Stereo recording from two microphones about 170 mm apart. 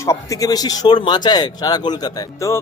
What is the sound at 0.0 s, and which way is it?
Speech, 20° left (ahead or behind).